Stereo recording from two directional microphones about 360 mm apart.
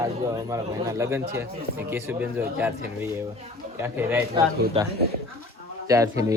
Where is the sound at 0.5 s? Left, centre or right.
Centre.